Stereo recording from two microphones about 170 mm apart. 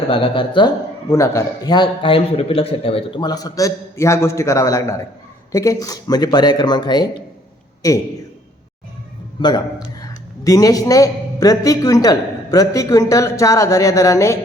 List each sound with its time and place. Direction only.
0.1 s a man's voice: 30° left (ahead or behind)
1.1 s a man's voice: 20° left (ahead or behind)
9.4 s a man's voice: 25° left (ahead or behind)